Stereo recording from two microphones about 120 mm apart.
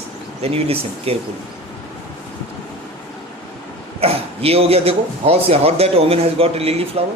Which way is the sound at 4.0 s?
55° right (ahead or behind).